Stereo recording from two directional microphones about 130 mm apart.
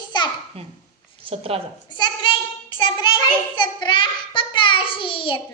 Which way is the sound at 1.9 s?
35° left (ahead or behind).